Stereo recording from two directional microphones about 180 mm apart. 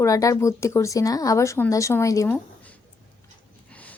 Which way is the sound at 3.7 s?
10° left (ahead or behind).